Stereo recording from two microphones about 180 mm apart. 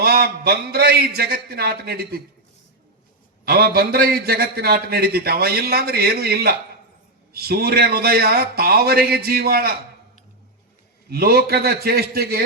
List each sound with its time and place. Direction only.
0.0 s a man's voice: 60° right (ahead or behind)
3.4 s a man's voice: 60° right (ahead or behind)
11.1 s a man's voice: 60° right (ahead or behind)